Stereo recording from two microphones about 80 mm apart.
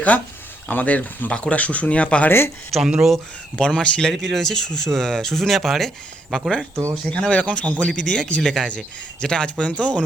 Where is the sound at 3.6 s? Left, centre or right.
Centre.